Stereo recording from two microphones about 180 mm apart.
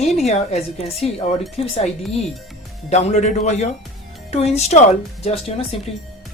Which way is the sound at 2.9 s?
40° left (ahead or behind).